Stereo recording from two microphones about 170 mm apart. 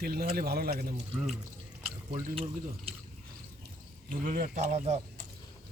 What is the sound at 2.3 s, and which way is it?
Speech, 35° right (ahead or behind).